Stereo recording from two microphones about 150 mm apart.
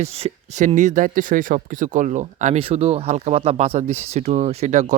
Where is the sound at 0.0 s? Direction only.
45° right (ahead or behind).